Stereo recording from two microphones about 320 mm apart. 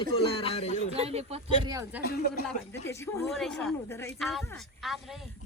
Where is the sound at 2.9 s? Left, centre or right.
Centre.